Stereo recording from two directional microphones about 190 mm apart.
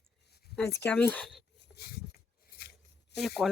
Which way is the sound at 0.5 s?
10° left (ahead or behind).